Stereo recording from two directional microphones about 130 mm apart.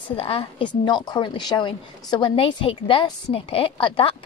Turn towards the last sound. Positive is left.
turn(degrees=40)  # may be behind; listen again after turning